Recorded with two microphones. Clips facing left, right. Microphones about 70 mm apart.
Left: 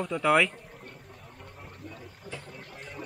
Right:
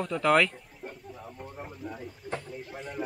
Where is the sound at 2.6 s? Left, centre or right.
Right.